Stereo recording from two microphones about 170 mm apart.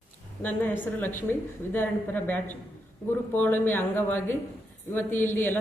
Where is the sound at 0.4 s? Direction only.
10° left (ahead or behind).